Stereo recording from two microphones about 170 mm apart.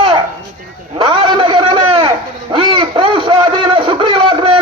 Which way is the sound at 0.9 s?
30° right (ahead or behind).